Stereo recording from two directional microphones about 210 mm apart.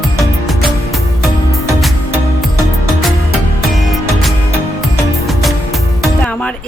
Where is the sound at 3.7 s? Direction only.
Centre (ahead or behind).